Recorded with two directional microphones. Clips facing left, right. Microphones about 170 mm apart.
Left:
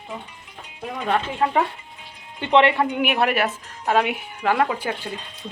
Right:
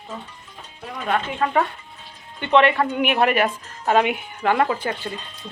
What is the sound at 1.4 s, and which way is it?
Speech, 20° left (ahead or behind).